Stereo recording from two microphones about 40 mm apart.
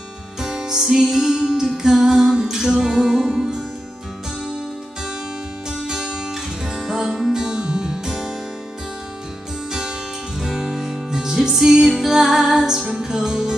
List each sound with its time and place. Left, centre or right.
0.4 s music: centre
5.7 s music: centre
9.7 s music: centre